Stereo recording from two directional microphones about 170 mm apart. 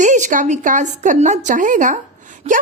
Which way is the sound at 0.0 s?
45° right (ahead or behind).